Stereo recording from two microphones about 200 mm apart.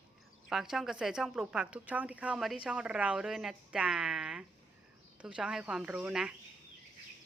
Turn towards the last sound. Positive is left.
turn(degrees=-5)  # may be behind; listen again after turning